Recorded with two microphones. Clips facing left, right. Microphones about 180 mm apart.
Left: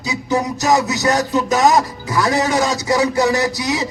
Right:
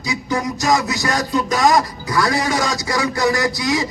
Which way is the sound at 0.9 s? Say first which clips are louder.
Left 3 dB; 20° left (ahead or behind).